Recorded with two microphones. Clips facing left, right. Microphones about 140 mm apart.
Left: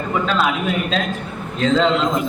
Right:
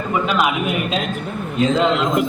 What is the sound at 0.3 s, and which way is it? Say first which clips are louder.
A man's voice: even; 15° right (ahead or behind).